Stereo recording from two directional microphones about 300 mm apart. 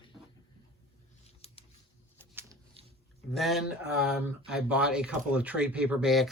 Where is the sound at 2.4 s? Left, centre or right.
Centre.